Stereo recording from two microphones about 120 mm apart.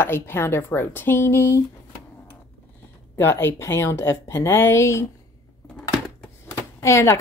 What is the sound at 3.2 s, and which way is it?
A woman's voice, 20° left (ahead or behind).